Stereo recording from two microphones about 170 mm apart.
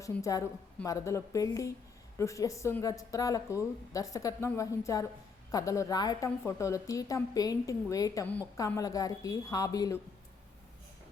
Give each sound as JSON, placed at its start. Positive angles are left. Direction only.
{"t": 0.0, "sound": "a woman's voice", "side_deg": 20}